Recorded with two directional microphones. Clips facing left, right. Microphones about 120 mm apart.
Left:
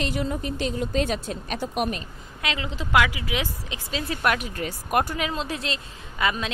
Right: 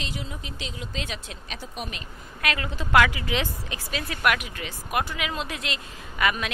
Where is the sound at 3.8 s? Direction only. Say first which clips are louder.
Left 1 dB; 25° left (ahead or behind).